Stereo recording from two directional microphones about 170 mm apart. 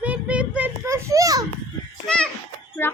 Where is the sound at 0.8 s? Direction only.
20° right (ahead or behind).